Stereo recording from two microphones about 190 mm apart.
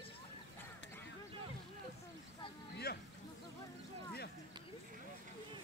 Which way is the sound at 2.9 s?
55° left (ahead or behind).